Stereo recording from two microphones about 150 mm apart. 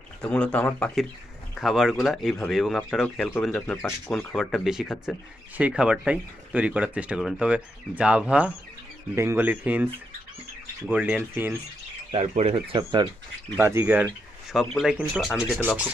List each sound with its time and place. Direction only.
0.2 s speech: 5° left (ahead or behind)
1.6 s speech: centre (ahead or behind)
10.9 s speech: 10° right (ahead or behind)
12.1 s speech: 45° right (ahead or behind)
12.7 s speech: 30° right (ahead or behind)
13.6 s speech: 15° right (ahead or behind)